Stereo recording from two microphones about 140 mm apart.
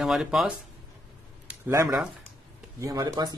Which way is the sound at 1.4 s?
20° right (ahead or behind).